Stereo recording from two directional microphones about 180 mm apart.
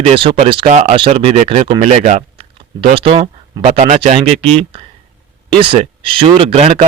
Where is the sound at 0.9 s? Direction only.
30° right (ahead or behind).